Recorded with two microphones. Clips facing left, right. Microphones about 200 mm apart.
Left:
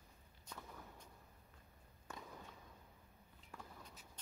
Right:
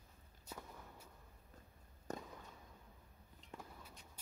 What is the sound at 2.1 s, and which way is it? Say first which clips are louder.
Fireworks: right 7 dB; 40° right (ahead or behind).